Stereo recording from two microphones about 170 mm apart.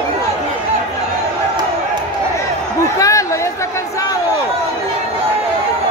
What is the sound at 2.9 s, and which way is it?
Chatter, 20° left (ahead or behind).